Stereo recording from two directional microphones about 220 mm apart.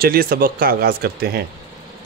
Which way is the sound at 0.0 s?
40° right (ahead or behind).